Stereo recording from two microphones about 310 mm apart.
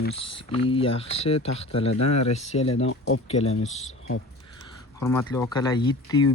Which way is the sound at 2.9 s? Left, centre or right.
Left.